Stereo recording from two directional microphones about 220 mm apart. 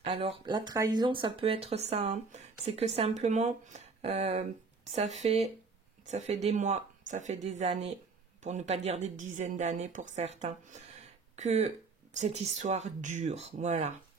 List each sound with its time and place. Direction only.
0.0 s a woman's voice: 25° right (ahead or behind)